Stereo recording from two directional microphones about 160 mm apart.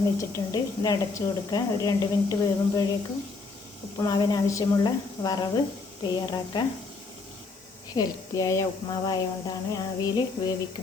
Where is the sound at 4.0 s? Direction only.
25° left (ahead or behind).